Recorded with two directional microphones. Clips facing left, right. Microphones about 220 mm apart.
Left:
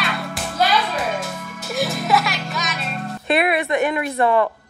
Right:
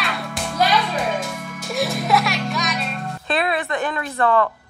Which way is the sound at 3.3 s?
20° left (ahead or behind).